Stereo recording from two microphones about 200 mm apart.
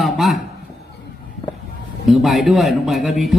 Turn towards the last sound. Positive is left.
turn(degrees=0)  # may be behind; listen again after turning